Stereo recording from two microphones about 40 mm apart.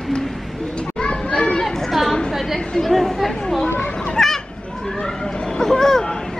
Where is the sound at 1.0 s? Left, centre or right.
Left; by 1.9 s centre.